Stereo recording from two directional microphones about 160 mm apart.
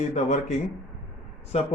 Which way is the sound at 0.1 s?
45° left (ahead or behind).